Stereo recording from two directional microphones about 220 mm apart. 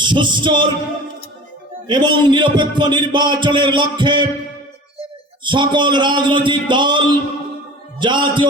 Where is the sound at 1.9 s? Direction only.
20° right (ahead or behind).